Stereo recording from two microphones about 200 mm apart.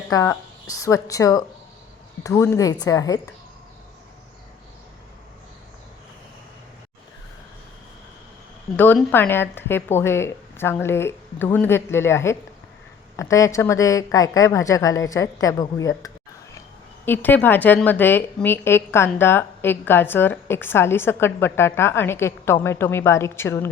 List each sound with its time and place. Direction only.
0.1 s a woman's voice: 15° left (ahead or behind)
8.7 s a woman's voice: 10° left (ahead or behind)